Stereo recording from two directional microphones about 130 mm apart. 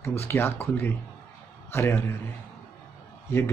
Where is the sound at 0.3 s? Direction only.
15° left (ahead or behind).